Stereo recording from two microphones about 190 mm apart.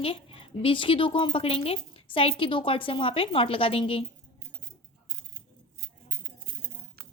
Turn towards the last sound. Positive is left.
turn(degrees=-55)  # may be behind; listen again after turning